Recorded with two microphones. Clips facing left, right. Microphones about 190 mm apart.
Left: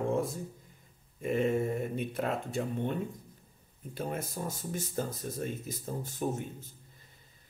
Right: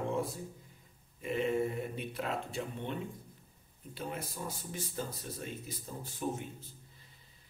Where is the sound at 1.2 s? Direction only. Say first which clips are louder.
Left 3 dB; 45° left (ahead or behind).